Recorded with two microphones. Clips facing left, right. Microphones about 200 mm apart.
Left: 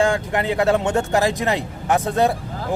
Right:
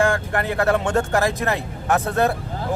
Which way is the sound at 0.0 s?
15° left (ahead or behind).